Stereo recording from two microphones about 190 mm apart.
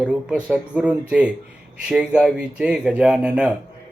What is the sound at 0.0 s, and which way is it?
Speech, 5° right (ahead or behind).